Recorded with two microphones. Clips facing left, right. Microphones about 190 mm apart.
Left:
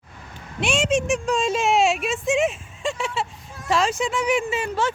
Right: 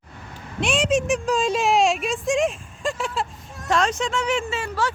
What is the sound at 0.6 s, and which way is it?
Speech, centre (ahead or behind).